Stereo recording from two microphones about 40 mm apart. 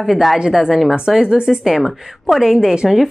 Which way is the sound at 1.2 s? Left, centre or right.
Right.